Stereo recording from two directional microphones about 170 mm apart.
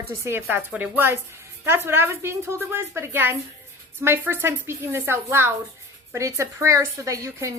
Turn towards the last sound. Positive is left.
turn(degrees=-20)  # may be behind; listen again after turning